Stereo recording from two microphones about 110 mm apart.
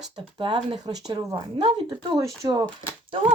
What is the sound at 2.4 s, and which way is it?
Speech, 40° right (ahead or behind).